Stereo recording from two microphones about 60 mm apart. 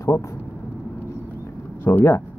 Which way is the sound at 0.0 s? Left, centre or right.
Left.